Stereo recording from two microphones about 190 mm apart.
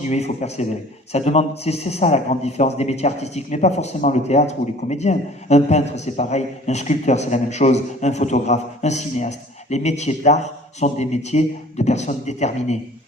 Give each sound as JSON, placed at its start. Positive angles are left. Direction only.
{"t": 0.0, "sound": "a man's voice", "side_deg": 35}